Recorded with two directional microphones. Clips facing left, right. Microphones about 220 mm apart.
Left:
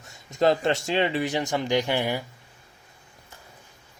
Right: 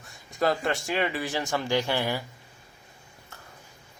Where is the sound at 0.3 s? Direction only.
25° left (ahead or behind).